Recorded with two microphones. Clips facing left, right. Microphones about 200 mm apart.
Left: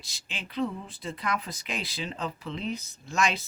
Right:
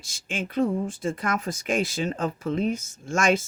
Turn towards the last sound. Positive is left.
turn(degrees=-50)  # may be behind; listen again after turning